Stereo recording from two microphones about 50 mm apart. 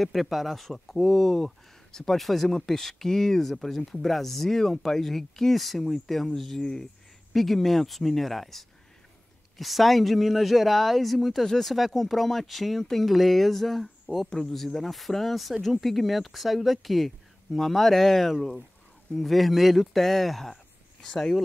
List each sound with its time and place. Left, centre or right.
0.0 s speech: centre